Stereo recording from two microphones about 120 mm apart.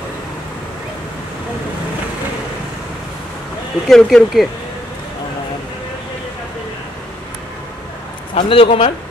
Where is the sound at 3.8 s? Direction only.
5° left (ahead or behind).